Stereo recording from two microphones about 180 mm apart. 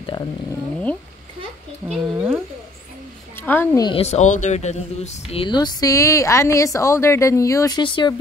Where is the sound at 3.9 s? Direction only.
35° left (ahead or behind).